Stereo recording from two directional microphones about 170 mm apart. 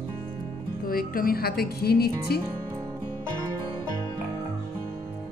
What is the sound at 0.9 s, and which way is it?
Speech, 60° left (ahead or behind).